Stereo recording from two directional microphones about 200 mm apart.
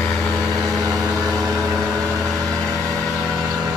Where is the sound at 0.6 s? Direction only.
15° right (ahead or behind).